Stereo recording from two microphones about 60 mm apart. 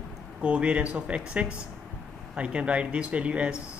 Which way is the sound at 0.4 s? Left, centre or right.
Centre.